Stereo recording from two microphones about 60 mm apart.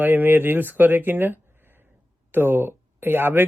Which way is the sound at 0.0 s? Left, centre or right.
Right.